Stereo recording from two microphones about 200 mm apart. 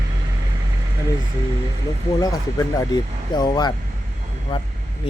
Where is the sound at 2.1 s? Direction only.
20° left (ahead or behind).